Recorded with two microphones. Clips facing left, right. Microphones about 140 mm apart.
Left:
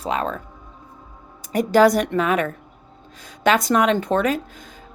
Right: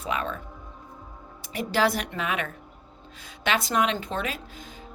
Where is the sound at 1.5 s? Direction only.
45° left (ahead or behind).